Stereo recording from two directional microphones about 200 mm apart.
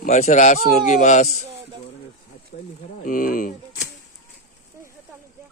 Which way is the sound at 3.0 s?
45° left (ahead or behind).